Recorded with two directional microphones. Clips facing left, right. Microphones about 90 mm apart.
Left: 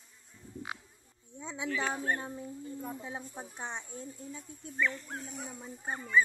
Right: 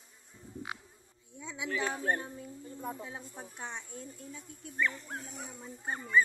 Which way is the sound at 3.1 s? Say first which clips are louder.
Left 3 dB; 20° left (ahead or behind).